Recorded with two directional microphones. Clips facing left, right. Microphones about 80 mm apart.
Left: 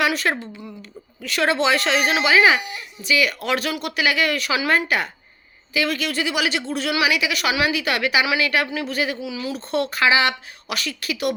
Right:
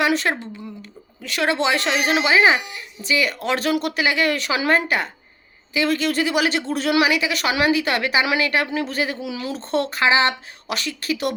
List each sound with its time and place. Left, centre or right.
0.0 s a sound: right
0.8 s speech: right
9.2 s speech: right
9.6 s speech: right